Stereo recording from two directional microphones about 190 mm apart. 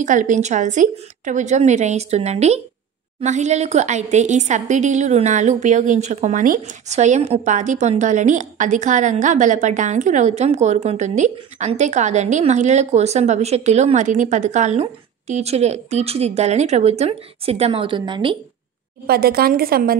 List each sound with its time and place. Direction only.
0.0 s a woman's voice: 40° right (ahead or behind); by 18.4 s 25° right (ahead or behind)
19.0 s a woman's voice: 55° right (ahead or behind)